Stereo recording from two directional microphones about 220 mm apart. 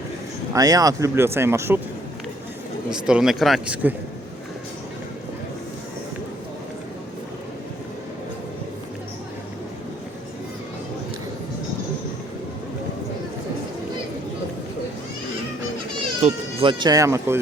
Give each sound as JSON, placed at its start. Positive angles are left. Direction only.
{"t": 0.5, "sound": "speech", "side_deg": -15}
{"t": 2.9, "sound": "speech", "side_deg": -5}
{"t": 16.2, "sound": "speech", "side_deg": -25}